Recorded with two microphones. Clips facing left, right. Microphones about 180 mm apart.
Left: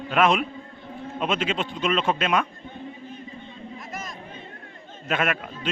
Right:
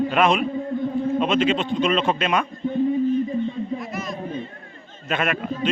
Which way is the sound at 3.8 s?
45° left (ahead or behind).